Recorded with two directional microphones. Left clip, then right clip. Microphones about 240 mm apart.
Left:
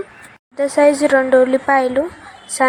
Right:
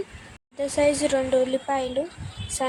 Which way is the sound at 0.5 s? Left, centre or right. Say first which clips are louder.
Left 9 dB; centre.